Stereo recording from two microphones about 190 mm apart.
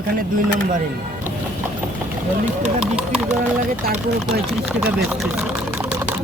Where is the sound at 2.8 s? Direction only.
5° right (ahead or behind).